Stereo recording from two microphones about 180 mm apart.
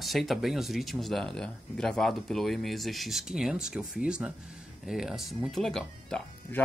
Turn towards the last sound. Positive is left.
turn(degrees=5)  # may be behind; listen again after turning